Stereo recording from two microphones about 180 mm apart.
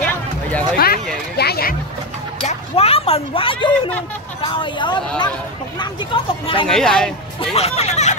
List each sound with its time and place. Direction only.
0.0 s a sound: 10° left (ahead or behind)
0.7 s speech: 55° left (ahead or behind)
1.3 s a sound: 60° left (ahead or behind)
2.4 s speech: 35° left (ahead or behind)
6.7 s speech: 5° left (ahead or behind)
7.3 s speech: 35° left (ahead or behind)